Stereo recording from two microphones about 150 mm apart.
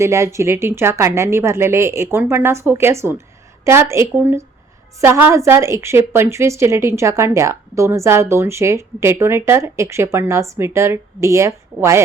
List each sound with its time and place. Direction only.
0.0 s a woman's voice: 20° right (ahead or behind)